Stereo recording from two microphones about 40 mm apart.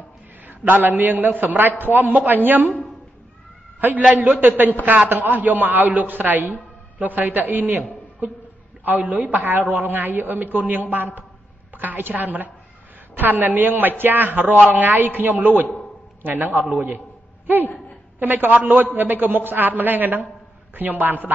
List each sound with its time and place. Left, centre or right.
0.5 s a woman's voice: right
4.1 s a woman's voice: right
8.8 s a woman's voice: right
18.2 s a woman's voice: right